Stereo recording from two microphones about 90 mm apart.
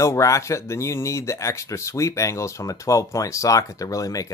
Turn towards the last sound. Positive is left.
turn(degrees=40)  # may be behind; listen again after turning